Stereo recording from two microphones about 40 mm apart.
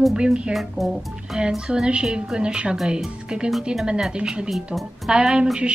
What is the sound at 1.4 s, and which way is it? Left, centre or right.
Speech, centre.